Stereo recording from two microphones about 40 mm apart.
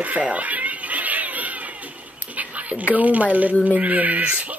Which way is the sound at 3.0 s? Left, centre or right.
Right.